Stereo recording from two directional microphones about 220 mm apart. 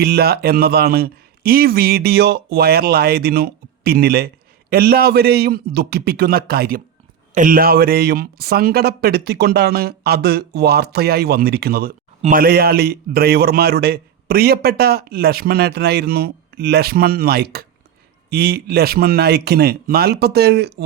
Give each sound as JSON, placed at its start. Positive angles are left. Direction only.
{"t": 0.0, "sound": "a man's voice", "side_deg": -45}